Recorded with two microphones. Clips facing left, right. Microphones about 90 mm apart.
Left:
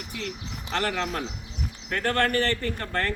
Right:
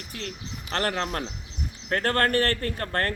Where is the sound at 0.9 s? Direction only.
50° right (ahead or behind).